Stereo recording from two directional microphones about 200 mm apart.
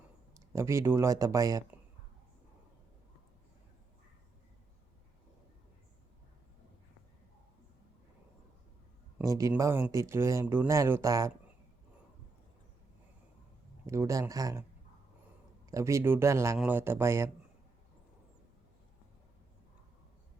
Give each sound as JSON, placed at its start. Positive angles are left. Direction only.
{"t": 0.3, "sound": "speech", "side_deg": -15}
{"t": 9.1, "sound": "speech", "side_deg": -15}
{"t": 13.8, "sound": "speech", "side_deg": -15}
{"t": 15.7, "sound": "speech", "side_deg": -15}